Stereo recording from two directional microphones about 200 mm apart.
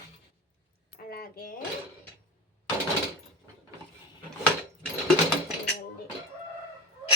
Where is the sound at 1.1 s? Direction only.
45° left (ahead or behind).